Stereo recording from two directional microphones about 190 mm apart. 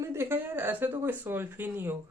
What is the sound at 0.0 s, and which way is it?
Speech, 15° right (ahead or behind).